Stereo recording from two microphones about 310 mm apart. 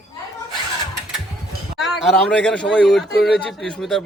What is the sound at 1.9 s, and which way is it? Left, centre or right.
A man's voice, centre.